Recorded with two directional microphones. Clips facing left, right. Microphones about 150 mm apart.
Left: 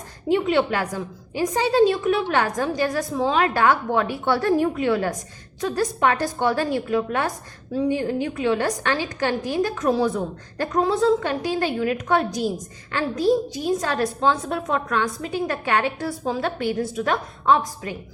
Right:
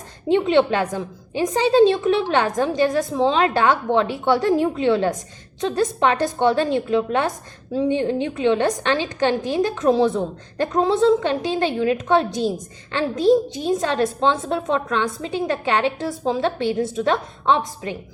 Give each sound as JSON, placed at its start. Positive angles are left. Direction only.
{"t": 0.3, "sound": "a woman's voice", "side_deg": -25}